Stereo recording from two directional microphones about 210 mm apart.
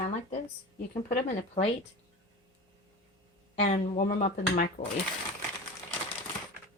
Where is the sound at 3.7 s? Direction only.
35° left (ahead or behind).